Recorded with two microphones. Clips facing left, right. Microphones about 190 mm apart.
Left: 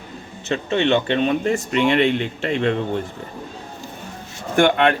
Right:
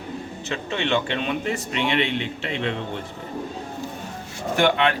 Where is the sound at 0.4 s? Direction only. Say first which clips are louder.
Left 8 dB; 35° left (ahead or behind).